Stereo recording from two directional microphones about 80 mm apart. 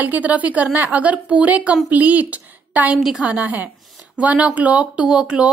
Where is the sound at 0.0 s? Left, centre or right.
Centre.